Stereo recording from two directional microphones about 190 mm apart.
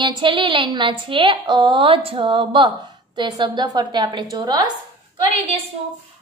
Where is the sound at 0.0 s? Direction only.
25° right (ahead or behind).